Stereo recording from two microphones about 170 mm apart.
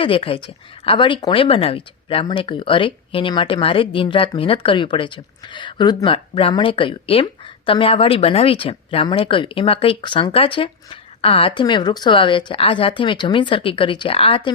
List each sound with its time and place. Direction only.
0.0 s speech: 30° left (ahead or behind)